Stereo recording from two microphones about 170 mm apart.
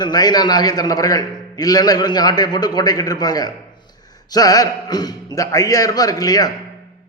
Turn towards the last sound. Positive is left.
turn(degrees=20)  # may be behind; listen again after turning